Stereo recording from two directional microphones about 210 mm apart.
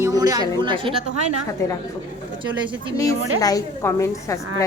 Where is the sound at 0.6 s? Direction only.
25° right (ahead or behind).